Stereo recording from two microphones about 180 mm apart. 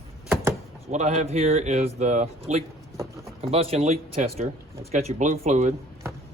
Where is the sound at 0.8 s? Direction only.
40° right (ahead or behind).